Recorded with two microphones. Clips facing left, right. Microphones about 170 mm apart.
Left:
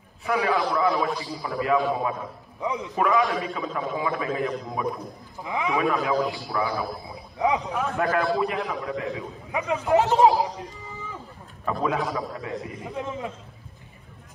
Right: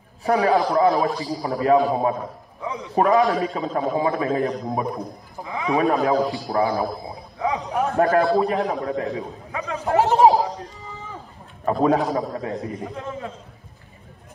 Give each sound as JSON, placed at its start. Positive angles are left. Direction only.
{"t": 0.2, "sound": "a man's voice", "side_deg": -35}
{"t": 2.6, "sound": "a man's voice", "side_deg": 15}
{"t": 2.9, "sound": "a man's voice", "side_deg": -40}
{"t": 7.3, "sound": "speech", "side_deg": 15}
{"t": 7.9, "sound": "a man's voice", "side_deg": -35}
{"t": 9.5, "sound": "a man's voice", "side_deg": 15}
{"t": 9.8, "sound": "speech", "side_deg": -55}
{"t": 11.6, "sound": "a man's voice", "side_deg": -40}
{"t": 12.9, "sound": "a man's voice", "side_deg": 15}